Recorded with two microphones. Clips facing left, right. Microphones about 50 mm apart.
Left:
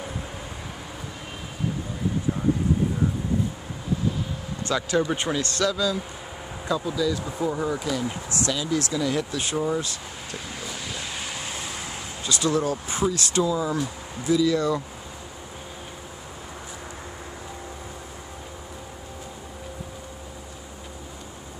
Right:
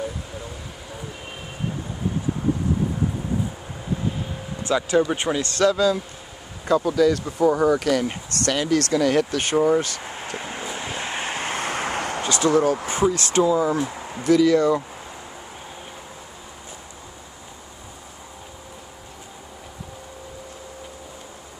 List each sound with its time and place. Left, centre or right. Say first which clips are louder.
4.6 s speech: right 4 dB; centre; by 5.9 s right
6.7 s speech: right 7 dB; right
8.1 s a sound: right 3 dB; right
12.3 s speech: right 5 dB; right
14.2 s speech: right 5 dB; right